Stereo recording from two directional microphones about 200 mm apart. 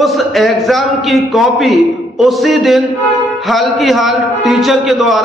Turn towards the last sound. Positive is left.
turn(degrees=0)  # may be behind; listen again after turning